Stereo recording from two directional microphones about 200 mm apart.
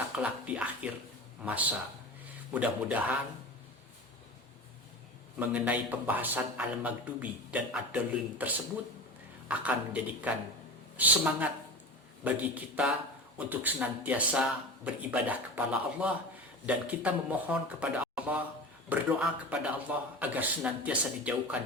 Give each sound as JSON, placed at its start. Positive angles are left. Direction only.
{"t": 0.2, "sound": "a man's voice", "side_deg": -5}
{"t": 2.5, "sound": "a man's voice", "side_deg": -5}
{"t": 5.4, "sound": "a man's voice", "side_deg": -10}